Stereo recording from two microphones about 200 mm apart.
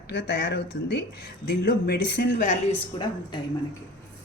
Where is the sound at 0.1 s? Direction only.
55° left (ahead or behind).